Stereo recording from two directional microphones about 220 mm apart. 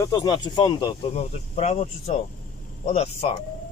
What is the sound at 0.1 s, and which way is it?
Speech, 20° left (ahead or behind).